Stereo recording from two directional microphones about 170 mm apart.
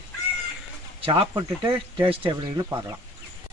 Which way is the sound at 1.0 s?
30° right (ahead or behind).